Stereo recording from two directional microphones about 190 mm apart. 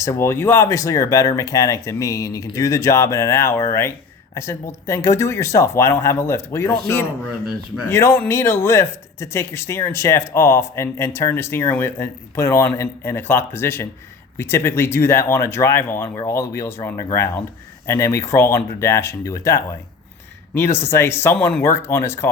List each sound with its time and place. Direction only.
0.0 s speech: 15° left (ahead or behind)